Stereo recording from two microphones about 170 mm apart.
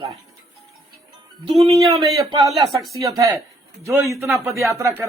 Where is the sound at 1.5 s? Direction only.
35° right (ahead or behind).